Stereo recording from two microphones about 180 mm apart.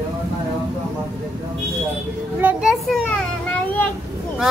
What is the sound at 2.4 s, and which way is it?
A child's voice, centre (ahead or behind).